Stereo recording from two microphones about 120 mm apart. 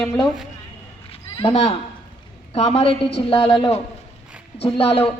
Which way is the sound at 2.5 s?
60° left (ahead or behind).